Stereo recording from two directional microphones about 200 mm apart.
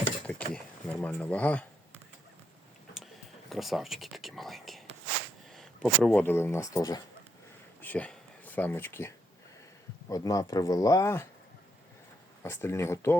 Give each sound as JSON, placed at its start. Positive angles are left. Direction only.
{"t": 0.3, "sound": "speech", "side_deg": 5}
{"t": 3.5, "sound": "speech", "side_deg": 0}
{"t": 7.8, "sound": "a sound", "side_deg": 10}
{"t": 10.1, "sound": "speech", "side_deg": 15}
{"t": 12.4, "sound": "speech", "side_deg": 10}